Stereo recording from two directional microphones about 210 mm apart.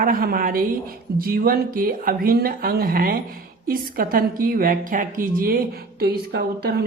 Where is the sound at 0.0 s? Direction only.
45° right (ahead or behind).